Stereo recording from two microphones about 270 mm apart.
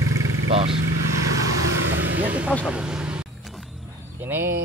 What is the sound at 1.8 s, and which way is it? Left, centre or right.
Vehicle, right.